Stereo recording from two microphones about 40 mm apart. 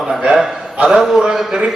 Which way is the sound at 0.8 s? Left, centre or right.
Centre.